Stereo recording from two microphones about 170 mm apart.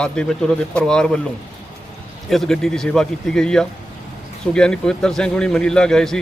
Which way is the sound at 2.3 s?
Centre (ahead or behind).